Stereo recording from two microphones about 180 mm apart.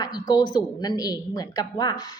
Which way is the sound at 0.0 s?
20° left (ahead or behind).